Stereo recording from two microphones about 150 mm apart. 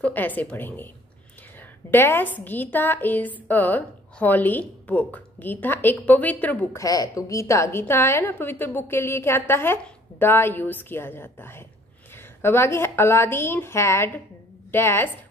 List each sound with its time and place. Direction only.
0.0 s a woman's voice: 10° left (ahead or behind)
1.9 s a woman's voice: 15° left (ahead or behind)
6.8 s a woman's voice: 25° left (ahead or behind)